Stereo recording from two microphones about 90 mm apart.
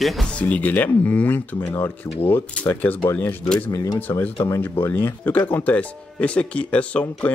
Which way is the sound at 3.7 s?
40° left (ahead or behind).